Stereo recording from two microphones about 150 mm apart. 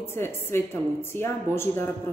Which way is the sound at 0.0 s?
15° left (ahead or behind).